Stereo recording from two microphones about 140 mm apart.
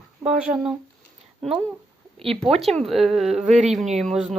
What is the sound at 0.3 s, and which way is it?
Speech, 5° right (ahead or behind).